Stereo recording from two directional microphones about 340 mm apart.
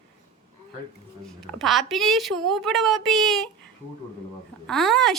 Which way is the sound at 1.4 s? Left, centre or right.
Centre.